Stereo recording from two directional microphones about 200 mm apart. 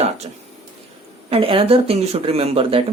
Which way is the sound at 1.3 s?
30° right (ahead or behind).